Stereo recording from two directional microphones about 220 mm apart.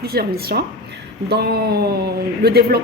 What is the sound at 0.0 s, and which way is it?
Speech, 45° right (ahead or behind).